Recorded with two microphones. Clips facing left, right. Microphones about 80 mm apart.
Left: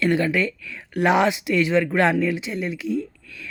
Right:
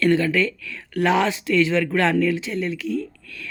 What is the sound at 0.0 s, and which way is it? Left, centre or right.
Speech, centre.